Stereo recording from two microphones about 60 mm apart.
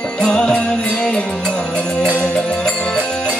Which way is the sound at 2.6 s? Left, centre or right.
Centre.